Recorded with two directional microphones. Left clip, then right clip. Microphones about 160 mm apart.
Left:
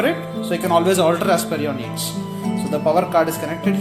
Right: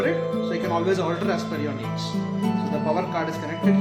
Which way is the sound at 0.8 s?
50° left (ahead or behind).